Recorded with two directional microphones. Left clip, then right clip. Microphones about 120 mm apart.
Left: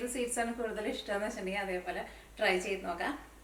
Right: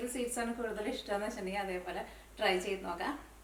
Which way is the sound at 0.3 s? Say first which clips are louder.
Left 2 dB; centre (ahead or behind).